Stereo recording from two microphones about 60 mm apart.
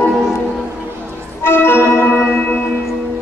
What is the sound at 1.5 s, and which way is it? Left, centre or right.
Organ, left.